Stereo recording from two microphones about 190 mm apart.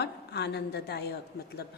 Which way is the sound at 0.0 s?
60° left (ahead or behind).